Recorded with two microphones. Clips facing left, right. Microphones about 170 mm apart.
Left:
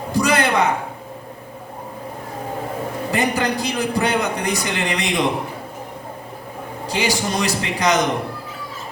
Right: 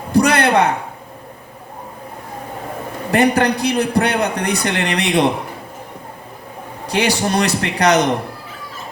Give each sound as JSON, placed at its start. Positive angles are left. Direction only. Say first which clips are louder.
{"t": 0.1, "sound": "a sound", "louder": "right 4 dB", "side_deg": -65}
{"t": 3.1, "sound": "a man's voice", "louder": "right 7 dB", "side_deg": -65}
{"t": 6.9, "sound": "a man's voice", "louder": "right 4 dB", "side_deg": -65}